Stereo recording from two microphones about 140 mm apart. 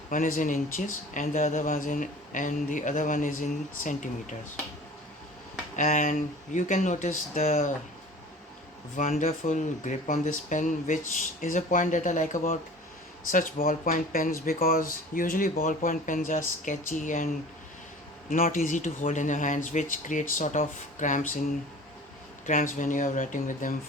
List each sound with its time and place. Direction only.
0.1 s speech: 70° left (ahead or behind)
5.7 s speech: 65° left (ahead or behind)
9.0 s speech: 65° left (ahead or behind)
18.3 s speech: 80° left; by 21.2 s 65° left (ahead or behind)
22.4 s speech: 70° left (ahead or behind)